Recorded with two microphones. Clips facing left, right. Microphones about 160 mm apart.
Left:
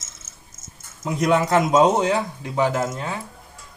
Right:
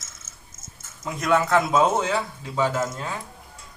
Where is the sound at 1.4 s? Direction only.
20° left (ahead or behind).